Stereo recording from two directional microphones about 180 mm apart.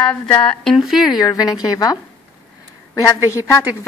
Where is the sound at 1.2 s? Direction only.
20° left (ahead or behind).